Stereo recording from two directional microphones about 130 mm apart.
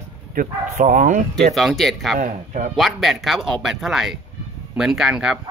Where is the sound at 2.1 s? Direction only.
85° right.